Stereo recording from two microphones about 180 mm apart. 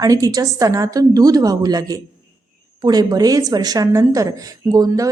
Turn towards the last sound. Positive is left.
turn(degrees=-20)  # may be behind; listen again after turning